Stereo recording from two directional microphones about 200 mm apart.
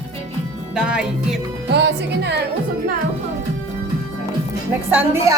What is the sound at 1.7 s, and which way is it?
Speech, 55° right (ahead or behind).